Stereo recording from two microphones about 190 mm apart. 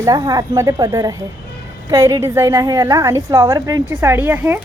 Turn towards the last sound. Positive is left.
turn(degrees=-10)  # may be behind; listen again after turning